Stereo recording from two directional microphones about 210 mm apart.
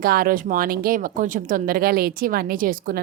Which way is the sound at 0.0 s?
45° right (ahead or behind).